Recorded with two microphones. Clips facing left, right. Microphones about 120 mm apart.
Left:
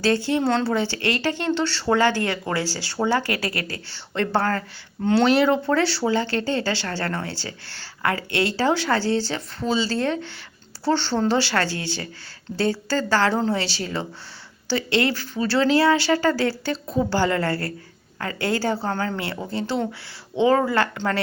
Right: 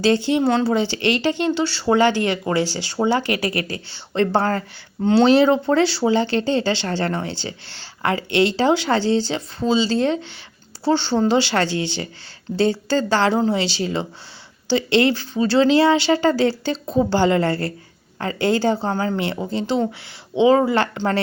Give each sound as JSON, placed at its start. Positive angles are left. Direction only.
{"t": 0.0, "sound": "speech", "side_deg": -20}